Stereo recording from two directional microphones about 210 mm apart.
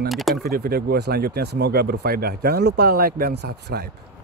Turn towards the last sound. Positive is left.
turn(degrees=-50)  # may be behind; listen again after turning